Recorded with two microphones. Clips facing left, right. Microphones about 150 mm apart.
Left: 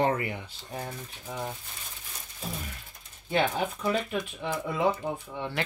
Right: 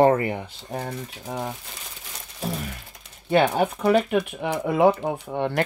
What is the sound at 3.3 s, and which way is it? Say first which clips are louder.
Speech: right 7 dB; 65° right (ahead or behind).